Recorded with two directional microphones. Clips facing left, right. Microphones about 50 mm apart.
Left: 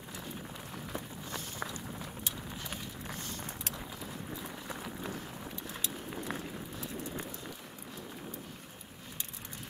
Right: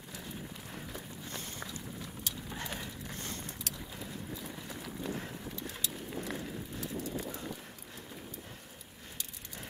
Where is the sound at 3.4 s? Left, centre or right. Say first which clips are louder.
Left 2 dB; left.